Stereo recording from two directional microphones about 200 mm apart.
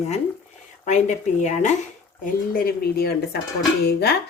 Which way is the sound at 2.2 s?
50° left (ahead or behind).